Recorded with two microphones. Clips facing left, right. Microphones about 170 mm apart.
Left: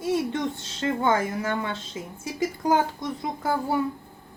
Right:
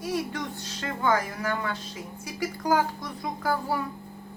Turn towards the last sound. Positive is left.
turn(degrees=25)  # may be behind; listen again after turning